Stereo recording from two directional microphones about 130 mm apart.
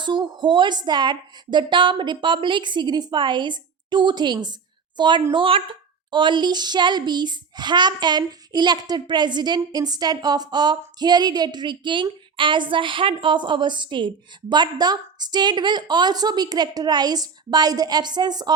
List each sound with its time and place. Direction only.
0.0 s a woman's voice: 35° right (ahead or behind)